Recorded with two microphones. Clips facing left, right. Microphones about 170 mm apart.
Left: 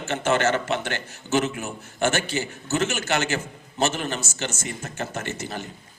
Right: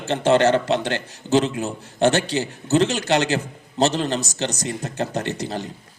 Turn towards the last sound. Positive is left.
turn(degrees=-35)  # may be behind; listen again after turning